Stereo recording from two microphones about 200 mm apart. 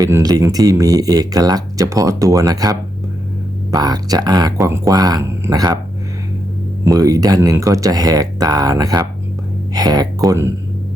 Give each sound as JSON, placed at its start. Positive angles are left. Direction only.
{"t": 0.0, "sound": "speech", "side_deg": -20}
{"t": 6.8, "sound": "speech", "side_deg": -20}